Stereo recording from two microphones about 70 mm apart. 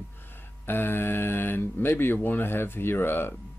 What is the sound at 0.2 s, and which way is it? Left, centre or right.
Speech, left.